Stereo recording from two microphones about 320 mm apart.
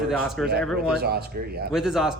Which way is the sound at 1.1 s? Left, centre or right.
Right.